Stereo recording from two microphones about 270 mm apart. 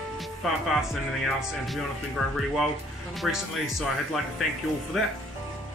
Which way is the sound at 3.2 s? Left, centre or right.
Centre.